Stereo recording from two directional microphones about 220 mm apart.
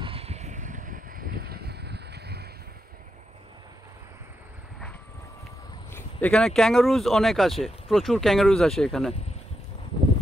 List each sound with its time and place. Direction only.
0.0 s vehicle: 25° right (ahead or behind); by 2.4 s 50° right (ahead or behind)
5.9 s speech: 5° left (ahead or behind)